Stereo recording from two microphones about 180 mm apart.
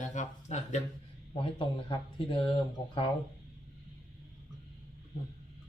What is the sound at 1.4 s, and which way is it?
Speech, 30° left (ahead or behind).